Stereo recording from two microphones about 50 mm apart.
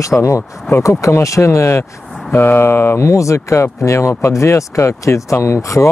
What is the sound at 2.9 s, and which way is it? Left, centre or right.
Speech, left.